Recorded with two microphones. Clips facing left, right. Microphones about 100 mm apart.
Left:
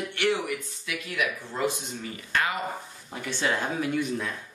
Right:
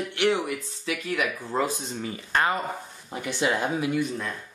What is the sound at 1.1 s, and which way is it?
Speech, 35° right (ahead or behind).